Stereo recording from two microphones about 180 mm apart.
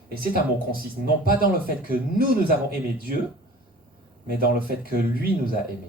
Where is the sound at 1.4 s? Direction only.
55° right (ahead or behind).